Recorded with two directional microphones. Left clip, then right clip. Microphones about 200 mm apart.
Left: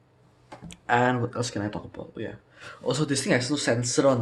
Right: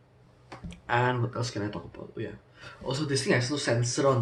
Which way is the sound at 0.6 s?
45° left (ahead or behind).